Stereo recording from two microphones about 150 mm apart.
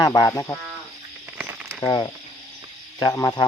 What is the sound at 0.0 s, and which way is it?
Speech, 25° left (ahead or behind).